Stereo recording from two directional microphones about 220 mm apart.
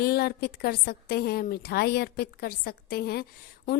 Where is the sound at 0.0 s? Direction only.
45° left (ahead or behind).